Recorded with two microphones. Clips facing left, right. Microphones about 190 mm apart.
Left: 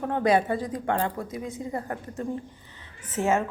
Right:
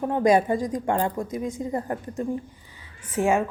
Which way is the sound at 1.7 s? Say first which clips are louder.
Right 4 dB; 20° right (ahead or behind).